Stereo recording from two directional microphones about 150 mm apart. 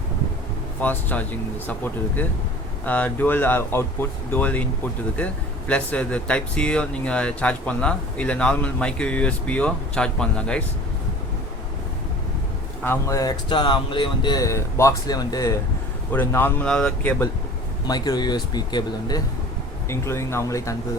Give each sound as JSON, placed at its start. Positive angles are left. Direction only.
{"t": 0.8, "sound": "speech", "side_deg": 10}
{"t": 12.8, "sound": "speech", "side_deg": 15}
{"t": 13.5, "sound": "speech", "side_deg": 30}
{"t": 16.1, "sound": "speech", "side_deg": 15}
{"t": 17.8, "sound": "speech", "side_deg": 25}
{"t": 19.9, "sound": "speech", "side_deg": 15}